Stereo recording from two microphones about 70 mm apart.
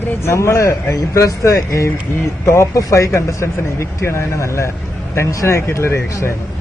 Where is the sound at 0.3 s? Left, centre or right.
Left.